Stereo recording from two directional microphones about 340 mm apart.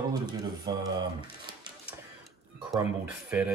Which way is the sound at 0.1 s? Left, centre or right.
Centre.